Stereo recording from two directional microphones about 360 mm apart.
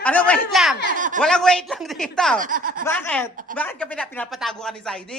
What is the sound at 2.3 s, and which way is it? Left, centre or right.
Speech, right.